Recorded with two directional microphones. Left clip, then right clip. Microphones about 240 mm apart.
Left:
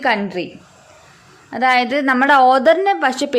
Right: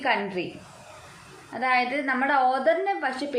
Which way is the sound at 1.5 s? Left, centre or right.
Left.